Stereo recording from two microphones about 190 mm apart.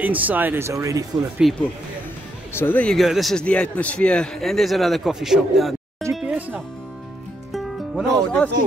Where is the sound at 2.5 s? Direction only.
10° left (ahead or behind).